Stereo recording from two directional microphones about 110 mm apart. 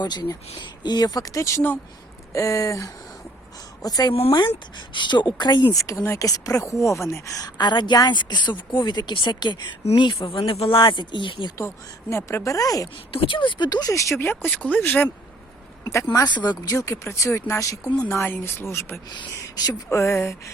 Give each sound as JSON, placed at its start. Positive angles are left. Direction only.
{"t": 0.0, "sound": "a woman's voice", "side_deg": 40}
{"t": 4.1, "sound": "speech", "side_deg": 55}
{"t": 5.7, "sound": "a woman's voice", "side_deg": 30}
{"t": 12.1, "sound": "a woman's voice", "side_deg": 25}
{"t": 13.1, "sound": "a woman's voice", "side_deg": 50}
{"t": 15.8, "sound": "a sound", "side_deg": 25}
{"t": 16.1, "sound": "a woman's voice", "side_deg": 40}
{"t": 16.7, "sound": "speech", "side_deg": 25}
{"t": 19.1, "sound": "speech", "side_deg": 35}